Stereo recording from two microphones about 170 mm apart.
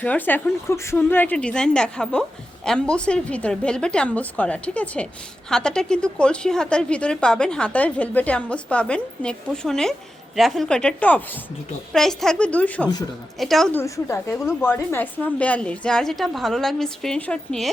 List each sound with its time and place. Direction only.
0.0 s a woman's voice: 10° left (ahead or behind)
13.7 s a woman's voice: 15° left (ahead or behind)